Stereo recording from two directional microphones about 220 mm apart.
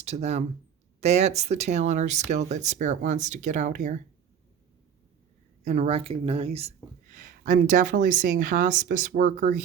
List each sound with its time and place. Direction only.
0.0 s speech: 30° right (ahead or behind)
5.6 s speech: 30° right (ahead or behind)